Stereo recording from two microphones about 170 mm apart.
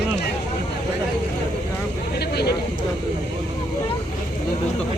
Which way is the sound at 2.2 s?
70° left (ahead or behind).